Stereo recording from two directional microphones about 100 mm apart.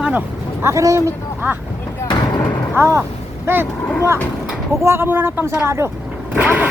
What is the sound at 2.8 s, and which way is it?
Speech, 30° right (ahead or behind).